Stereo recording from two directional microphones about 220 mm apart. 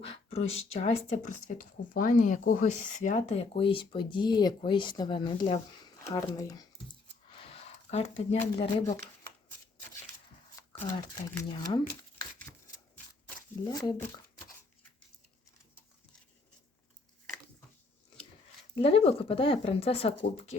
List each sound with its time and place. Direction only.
0.3 s speech: 25° left (ahead or behind)
7.3 s zipper: 25° left (ahead or behind)
10.8 s speech: 20° left (ahead or behind)
12.2 s shuffling cards: 15° left (ahead or behind)
13.7 s speech: 15° left (ahead or behind)
18.7 s speech: 25° left (ahead or behind)